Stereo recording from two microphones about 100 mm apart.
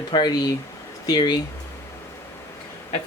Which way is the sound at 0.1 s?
45° left (ahead or behind).